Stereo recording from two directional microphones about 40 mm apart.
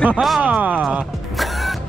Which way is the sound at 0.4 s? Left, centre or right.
Right.